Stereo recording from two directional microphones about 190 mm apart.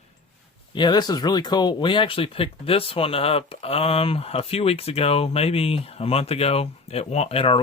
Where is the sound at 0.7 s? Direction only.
25° left (ahead or behind).